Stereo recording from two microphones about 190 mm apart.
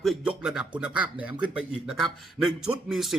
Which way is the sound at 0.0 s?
Centre (ahead or behind).